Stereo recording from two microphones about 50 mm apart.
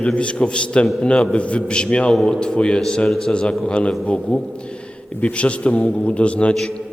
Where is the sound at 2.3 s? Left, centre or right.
Centre.